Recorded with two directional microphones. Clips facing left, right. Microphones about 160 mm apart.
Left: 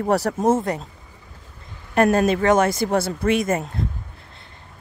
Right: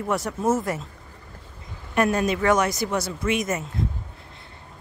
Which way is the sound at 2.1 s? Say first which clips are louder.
Left 4 dB; 30° left (ahead or behind).